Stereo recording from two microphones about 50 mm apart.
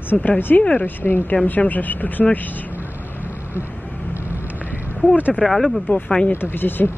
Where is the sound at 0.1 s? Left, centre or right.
Centre.